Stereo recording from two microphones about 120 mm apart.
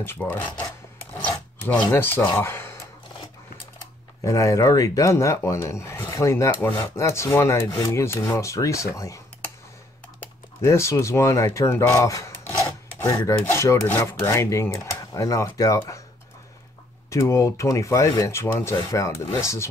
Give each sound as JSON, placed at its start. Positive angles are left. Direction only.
{"t": 0.0, "sound": "speech", "side_deg": 15}
{"t": 1.9, "sound": "speech", "side_deg": 20}
{"t": 4.2, "sound": "speech", "side_deg": 25}
{"t": 10.6, "sound": "speech", "side_deg": 25}
{"t": 17.1, "sound": "speech", "side_deg": 25}